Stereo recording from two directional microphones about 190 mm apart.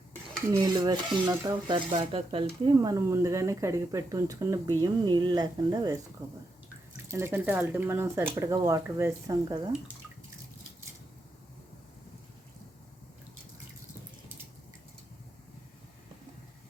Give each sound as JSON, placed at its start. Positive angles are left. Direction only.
{"t": 0.6, "sound": "speech", "side_deg": -20}
{"t": 2.7, "sound": "speech", "side_deg": -15}